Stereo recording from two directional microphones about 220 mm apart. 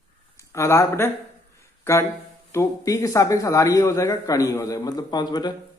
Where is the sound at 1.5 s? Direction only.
10° left (ahead or behind).